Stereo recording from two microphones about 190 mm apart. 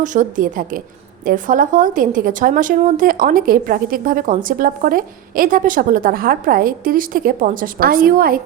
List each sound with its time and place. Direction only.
0.0 s a woman's voice: 40° right (ahead or behind)